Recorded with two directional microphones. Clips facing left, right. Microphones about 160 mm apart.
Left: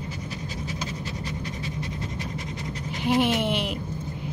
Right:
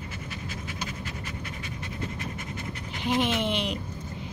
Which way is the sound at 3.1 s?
10° left (ahead or behind).